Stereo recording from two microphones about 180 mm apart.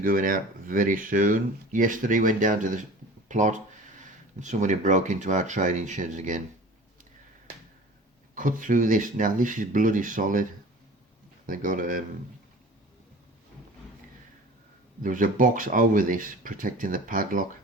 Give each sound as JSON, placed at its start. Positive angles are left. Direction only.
{"t": 0.0, "sound": "speech", "side_deg": -50}
{"t": 8.4, "sound": "speech", "side_deg": -45}
{"t": 11.4, "sound": "speech", "side_deg": -50}
{"t": 15.0, "sound": "speech", "side_deg": -45}